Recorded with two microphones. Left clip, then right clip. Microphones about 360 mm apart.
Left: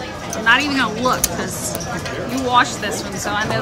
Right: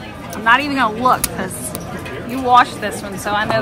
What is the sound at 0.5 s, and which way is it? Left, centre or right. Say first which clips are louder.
Speech: right 2 dB; centre.